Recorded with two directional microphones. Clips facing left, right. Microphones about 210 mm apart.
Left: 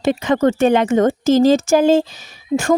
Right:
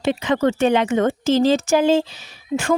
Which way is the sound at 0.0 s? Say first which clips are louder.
Left 3 dB; 45° left (ahead or behind).